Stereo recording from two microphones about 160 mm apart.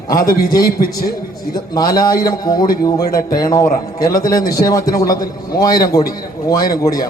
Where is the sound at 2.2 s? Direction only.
25° left (ahead or behind).